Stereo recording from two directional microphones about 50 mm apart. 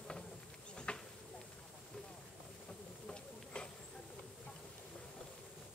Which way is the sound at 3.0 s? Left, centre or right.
Centre.